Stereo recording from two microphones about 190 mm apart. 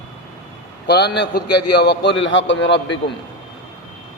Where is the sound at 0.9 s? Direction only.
60° left (ahead or behind).